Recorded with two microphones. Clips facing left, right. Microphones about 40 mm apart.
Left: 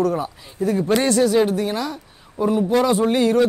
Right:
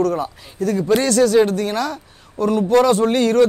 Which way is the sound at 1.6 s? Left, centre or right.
Right.